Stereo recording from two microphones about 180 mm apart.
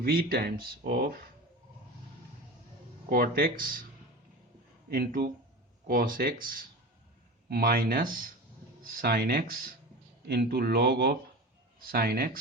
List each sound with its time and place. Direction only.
0.0 s speech: 60° right (ahead or behind)
3.1 s speech: 55° right (ahead or behind)
4.9 s speech: 60° right (ahead or behind)